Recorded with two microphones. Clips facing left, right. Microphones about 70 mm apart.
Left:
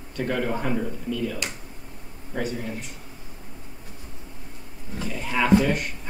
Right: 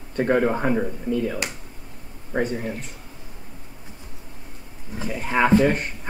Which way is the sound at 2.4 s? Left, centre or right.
Right.